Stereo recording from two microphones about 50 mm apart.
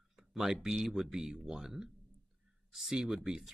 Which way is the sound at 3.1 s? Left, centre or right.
Centre.